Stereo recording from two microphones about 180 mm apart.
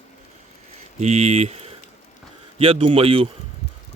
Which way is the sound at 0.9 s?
35° right (ahead or behind).